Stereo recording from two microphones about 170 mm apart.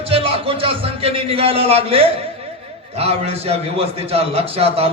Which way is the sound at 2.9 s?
35° right (ahead or behind).